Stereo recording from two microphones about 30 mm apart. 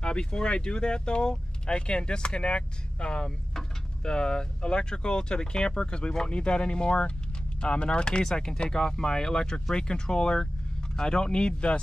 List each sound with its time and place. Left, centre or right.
0.0 s speech: left
3.3 s speech: left